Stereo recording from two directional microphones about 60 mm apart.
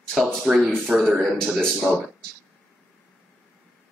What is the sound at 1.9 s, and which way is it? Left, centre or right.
Speech, centre.